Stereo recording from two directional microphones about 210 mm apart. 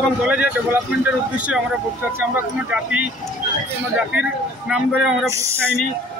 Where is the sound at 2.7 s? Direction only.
5° right (ahead or behind).